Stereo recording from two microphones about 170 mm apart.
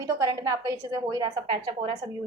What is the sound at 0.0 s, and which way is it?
A woman's voice, 20° right (ahead or behind).